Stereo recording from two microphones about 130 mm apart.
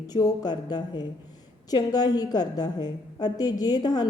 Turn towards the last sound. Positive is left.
turn(degrees=30)  # may be behind; listen again after turning